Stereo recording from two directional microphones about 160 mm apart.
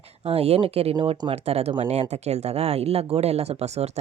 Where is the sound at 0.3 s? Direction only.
40° right (ahead or behind).